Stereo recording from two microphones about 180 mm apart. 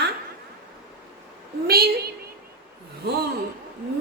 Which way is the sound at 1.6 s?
60° right (ahead or behind).